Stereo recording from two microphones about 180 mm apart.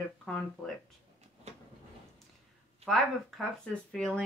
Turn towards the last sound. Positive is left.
turn(degrees=5)  # may be behind; listen again after turning